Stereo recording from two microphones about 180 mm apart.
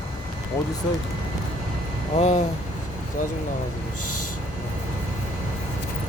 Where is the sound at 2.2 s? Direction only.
40° left (ahead or behind).